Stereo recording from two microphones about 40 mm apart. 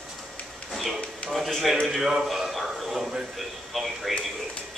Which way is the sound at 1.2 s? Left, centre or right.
Left.